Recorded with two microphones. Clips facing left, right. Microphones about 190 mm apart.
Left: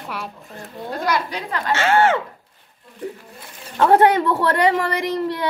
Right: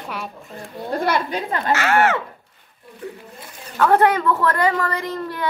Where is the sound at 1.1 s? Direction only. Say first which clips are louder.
Right 2 dB; 25° right (ahead or behind).